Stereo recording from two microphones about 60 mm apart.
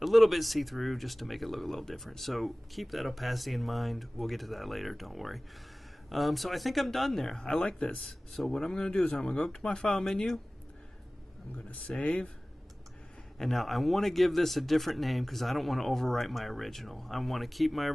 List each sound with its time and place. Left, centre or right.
0.0 s speech: centre; by 8.1 s left
8.3 s speech: centre
11.5 s speech: left
13.4 s speech: centre